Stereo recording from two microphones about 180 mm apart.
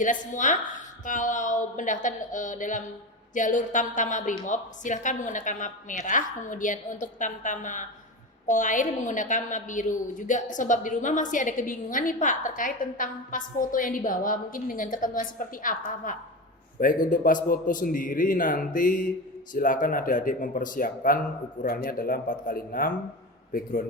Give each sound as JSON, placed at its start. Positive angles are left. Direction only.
{"t": 0.0, "sound": "a woman's voice", "side_deg": 45}